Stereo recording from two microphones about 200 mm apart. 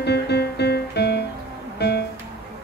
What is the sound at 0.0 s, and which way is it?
Music, 55° left (ahead or behind).